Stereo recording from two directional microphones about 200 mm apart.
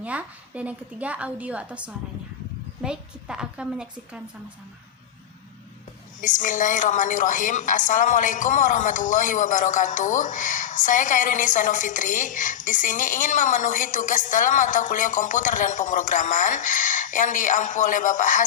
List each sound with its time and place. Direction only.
0.0 s a woman's voice: 5° right (ahead or behind)
6.1 s a woman's voice: 40° left (ahead or behind)